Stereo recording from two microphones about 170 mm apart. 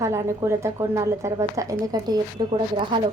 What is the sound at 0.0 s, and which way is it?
A woman's voice, 15° right (ahead or behind).